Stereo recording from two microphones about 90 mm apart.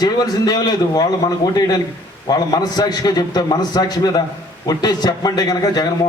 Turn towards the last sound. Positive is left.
turn(degrees=45)  # may be behind; listen again after turning